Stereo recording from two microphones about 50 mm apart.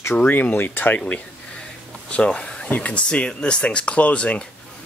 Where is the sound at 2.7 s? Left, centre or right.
Left.